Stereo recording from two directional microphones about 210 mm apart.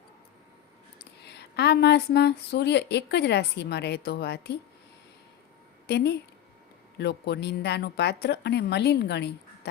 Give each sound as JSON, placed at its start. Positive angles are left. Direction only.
{"t": 0.9, "sound": "speech", "side_deg": 55}
{"t": 5.9, "sound": "speech", "side_deg": 50}